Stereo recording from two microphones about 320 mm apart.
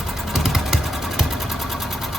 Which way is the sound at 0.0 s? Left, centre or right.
Centre.